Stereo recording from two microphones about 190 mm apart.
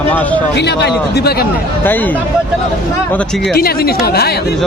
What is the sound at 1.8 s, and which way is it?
Speech, 10° left (ahead or behind).